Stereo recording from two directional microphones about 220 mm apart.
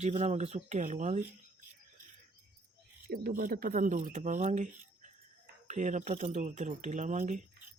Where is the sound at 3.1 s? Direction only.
40° right (ahead or behind).